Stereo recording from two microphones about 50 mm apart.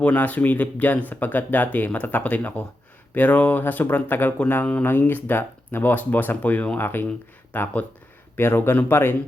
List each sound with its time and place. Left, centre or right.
0.0 s speech: left
6.7 s speech: left
8.4 s speech: left